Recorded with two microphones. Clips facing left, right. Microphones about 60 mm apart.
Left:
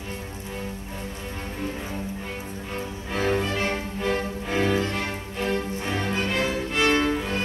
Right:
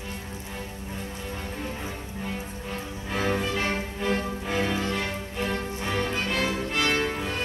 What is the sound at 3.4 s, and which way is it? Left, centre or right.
Music, left.